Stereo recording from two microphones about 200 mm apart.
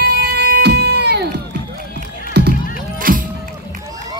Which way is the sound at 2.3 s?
55° right (ahead or behind).